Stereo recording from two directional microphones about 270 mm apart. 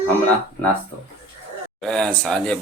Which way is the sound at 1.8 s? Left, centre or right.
Centre.